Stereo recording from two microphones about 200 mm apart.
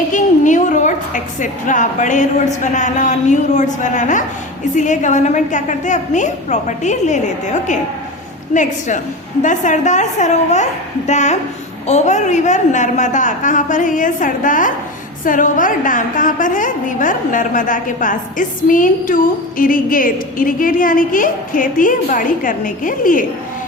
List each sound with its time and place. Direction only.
0.1 s a woman's voice: 40° left (ahead or behind)
9.4 s a woman's voice: 40° left (ahead or behind)